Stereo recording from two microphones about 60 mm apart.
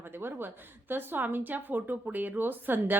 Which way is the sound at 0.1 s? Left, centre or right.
Right.